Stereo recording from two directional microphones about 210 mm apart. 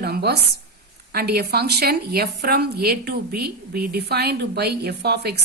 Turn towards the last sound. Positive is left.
turn(degrees=-50)  # may be behind; listen again after turning